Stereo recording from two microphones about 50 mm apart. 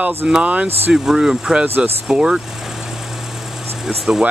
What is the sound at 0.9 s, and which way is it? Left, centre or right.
Speech, centre.